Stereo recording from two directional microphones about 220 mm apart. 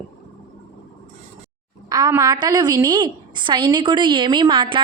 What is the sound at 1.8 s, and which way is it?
A woman's voice, 15° right (ahead or behind).